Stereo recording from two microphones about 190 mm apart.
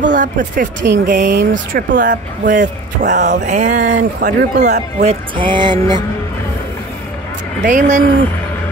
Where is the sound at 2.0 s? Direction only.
45° right (ahead or behind).